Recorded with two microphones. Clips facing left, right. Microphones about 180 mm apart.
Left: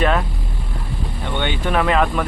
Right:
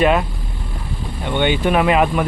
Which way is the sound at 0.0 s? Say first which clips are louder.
Right 3 dB; 10° right (ahead or behind).